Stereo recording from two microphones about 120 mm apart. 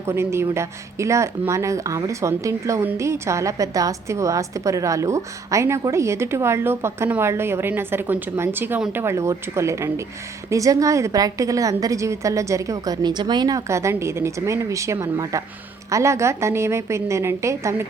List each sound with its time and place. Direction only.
0.0 s speech: 20° right (ahead or behind)